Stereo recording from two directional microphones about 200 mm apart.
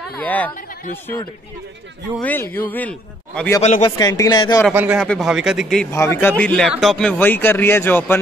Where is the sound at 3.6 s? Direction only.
35° left (ahead or behind).